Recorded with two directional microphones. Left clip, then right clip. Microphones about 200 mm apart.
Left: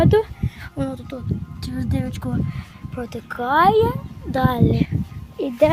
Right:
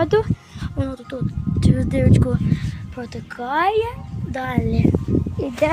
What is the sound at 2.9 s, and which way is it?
A child's voice, 10° left (ahead or behind).